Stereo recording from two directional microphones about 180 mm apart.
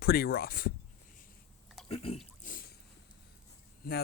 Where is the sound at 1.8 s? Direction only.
30° left (ahead or behind).